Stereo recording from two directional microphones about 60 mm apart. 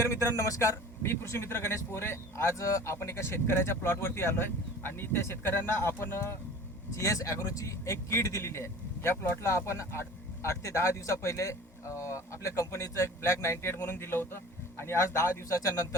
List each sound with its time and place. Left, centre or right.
0.0 s speech: left
1.0 s speech: left
7.0 s speech: left
15.6 s speech: left